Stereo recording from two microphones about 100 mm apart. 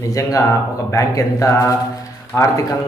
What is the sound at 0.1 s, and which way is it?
A man's voice, 35° left (ahead or behind).